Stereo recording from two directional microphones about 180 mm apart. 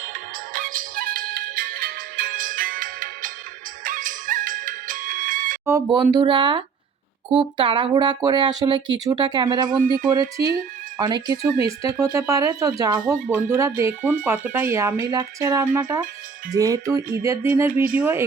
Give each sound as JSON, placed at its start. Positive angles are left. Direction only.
{"t": 0.5, "sound": "music", "side_deg": -50}
{"t": 5.6, "sound": "speech", "side_deg": -20}
{"t": 9.6, "sound": "speech", "side_deg": -50}
{"t": 10.1, "sound": "speech", "side_deg": -20}
{"t": 13.1, "sound": "a sound", "side_deg": -15}